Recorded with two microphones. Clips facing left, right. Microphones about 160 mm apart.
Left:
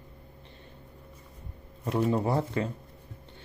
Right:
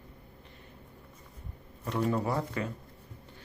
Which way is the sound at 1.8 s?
30° left (ahead or behind).